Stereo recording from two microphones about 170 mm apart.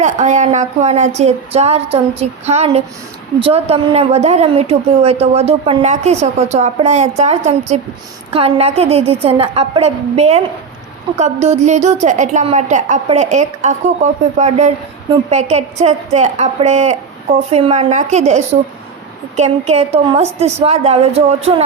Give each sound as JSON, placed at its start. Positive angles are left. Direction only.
{"t": 0.0, "sound": "a woman's voice", "side_deg": -45}